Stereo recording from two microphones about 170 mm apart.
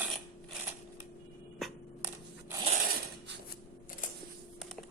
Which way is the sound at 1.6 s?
Centre (ahead or behind).